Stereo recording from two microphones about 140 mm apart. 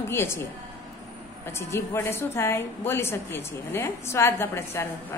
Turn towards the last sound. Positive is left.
turn(degrees=20)  # may be behind; listen again after turning